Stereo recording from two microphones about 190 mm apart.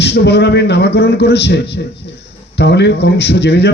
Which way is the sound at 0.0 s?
65° left (ahead or behind).